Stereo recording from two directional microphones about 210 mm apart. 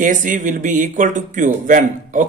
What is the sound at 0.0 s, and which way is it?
Speech, 40° right (ahead or behind).